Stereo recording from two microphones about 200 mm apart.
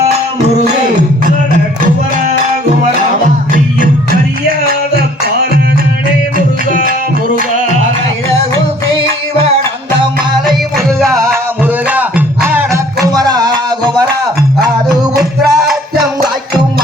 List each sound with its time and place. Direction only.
11.6 s music: 5° right (ahead or behind)
13.1 s music: 20° right (ahead or behind)
15.2 s music: centre (ahead or behind)